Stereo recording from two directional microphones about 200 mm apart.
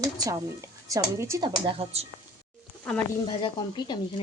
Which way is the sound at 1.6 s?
30° right (ahead or behind).